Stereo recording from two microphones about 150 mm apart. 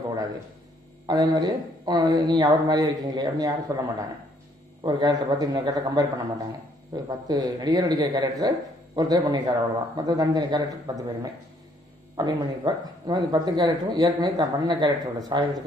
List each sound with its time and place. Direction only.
1.0 s a man's voice: 25° right (ahead or behind)
4.8 s a man's voice: 25° right (ahead or behind)
12.2 s a man's voice: 25° right (ahead or behind)